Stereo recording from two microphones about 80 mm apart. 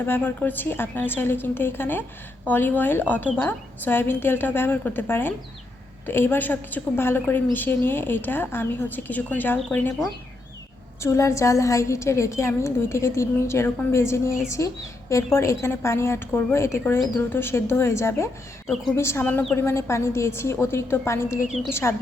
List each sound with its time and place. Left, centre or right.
0.0 s a woman's voice: left
11.0 s a woman's voice: left
18.7 s a woman's voice: centre
18.9 s a woman's voice: left
19.2 s a woman's voice: left
19.5 s a woman's voice: left